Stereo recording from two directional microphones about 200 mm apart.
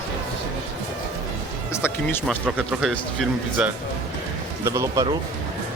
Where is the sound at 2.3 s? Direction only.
5° right (ahead or behind).